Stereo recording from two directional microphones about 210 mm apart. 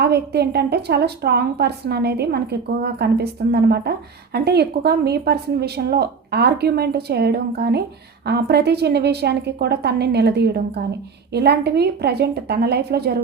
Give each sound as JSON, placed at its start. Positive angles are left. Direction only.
{"t": 0.0, "sound": "a woman's voice", "side_deg": -50}